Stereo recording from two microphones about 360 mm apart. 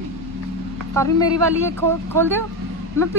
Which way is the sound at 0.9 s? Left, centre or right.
Centre.